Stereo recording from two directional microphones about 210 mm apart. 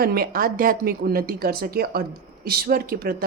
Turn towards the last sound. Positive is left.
turn(degrees=-45)  # may be behind; listen again after turning